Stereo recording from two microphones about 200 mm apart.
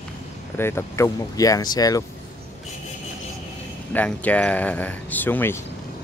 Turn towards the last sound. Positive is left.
turn(degrees=10)  # may be behind; listen again after turning